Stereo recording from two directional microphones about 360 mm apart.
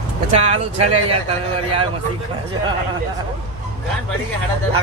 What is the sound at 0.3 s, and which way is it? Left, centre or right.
Speech, centre.